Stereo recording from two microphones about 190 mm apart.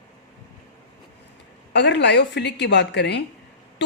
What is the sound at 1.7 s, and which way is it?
Speech, 65° left (ahead or behind).